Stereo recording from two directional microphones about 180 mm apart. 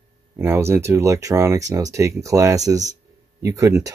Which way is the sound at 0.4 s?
15° right (ahead or behind).